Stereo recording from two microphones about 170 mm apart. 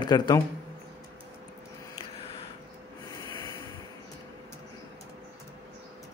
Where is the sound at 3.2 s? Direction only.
20° left (ahead or behind).